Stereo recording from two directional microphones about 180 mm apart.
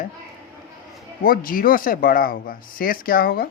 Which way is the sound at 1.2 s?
50° left (ahead or behind).